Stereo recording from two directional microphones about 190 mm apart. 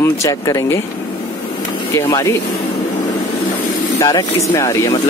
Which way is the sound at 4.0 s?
20° left (ahead or behind).